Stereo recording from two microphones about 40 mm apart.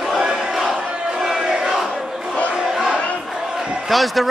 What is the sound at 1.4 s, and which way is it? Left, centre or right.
Battle cry, right.